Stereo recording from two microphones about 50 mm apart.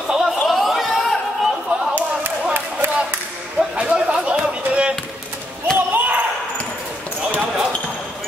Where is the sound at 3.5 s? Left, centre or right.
Centre.